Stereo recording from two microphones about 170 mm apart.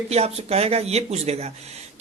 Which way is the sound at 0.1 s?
40° right (ahead or behind).